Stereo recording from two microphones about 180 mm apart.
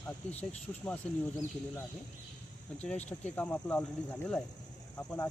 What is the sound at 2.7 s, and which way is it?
Speech, 5° left (ahead or behind).